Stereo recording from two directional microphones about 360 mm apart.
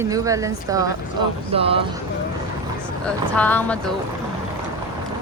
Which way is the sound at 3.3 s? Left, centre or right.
Centre.